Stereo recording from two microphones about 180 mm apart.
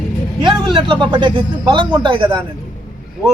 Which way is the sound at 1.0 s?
25° right (ahead or behind).